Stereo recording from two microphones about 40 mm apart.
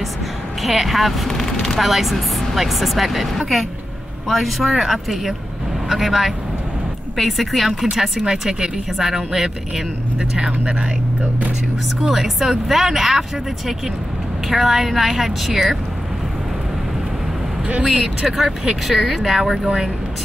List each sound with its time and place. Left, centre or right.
0.6 s speech: centre
1.8 s speech: centre
8.3 s a woman's voice: centre
12.0 s speech: centre
14.5 s a woman's voice: centre
18.2 s speech: centre
19.6 s a woman's voice: centre